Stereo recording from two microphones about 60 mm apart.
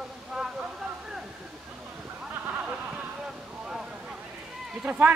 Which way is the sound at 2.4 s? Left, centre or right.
Right.